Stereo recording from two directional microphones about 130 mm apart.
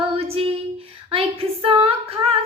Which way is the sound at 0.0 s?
50° right (ahead or behind).